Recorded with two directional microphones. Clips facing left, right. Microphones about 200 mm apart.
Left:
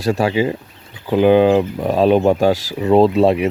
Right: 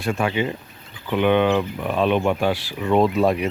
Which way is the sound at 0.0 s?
35° left (ahead or behind).